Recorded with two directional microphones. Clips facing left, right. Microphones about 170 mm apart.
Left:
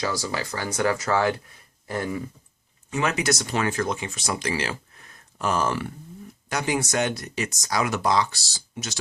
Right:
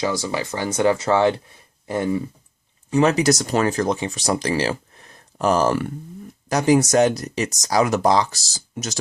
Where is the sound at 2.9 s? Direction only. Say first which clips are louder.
Right 8 dB; 35° right (ahead or behind).